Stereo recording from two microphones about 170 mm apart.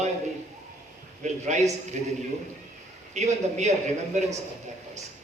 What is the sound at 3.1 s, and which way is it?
A man's voice, 40° right (ahead or behind).